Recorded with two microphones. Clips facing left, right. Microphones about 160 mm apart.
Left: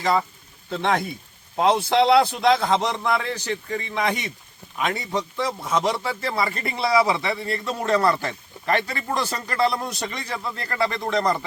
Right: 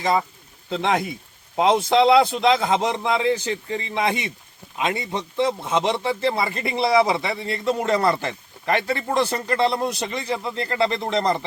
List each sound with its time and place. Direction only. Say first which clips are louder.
1.5 s a man's voice: right 1 dB; 15° right (ahead or behind)